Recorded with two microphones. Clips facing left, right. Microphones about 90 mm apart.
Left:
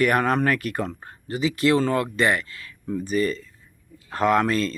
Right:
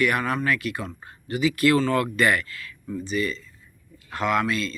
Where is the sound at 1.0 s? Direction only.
35° left (ahead or behind).